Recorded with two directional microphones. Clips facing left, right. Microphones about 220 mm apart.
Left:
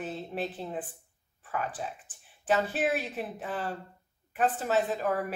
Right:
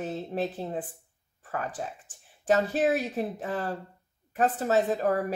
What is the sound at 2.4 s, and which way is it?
A woman's voice, 40° right (ahead or behind).